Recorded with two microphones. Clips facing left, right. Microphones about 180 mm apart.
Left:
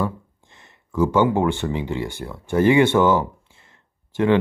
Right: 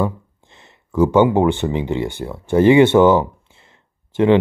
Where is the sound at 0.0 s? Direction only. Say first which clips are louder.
Right 4 dB; 25° right (ahead or behind).